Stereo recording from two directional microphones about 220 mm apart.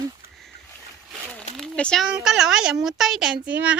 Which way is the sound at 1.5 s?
5° left (ahead or behind).